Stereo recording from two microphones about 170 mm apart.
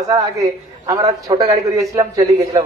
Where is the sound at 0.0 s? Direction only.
20° right (ahead or behind).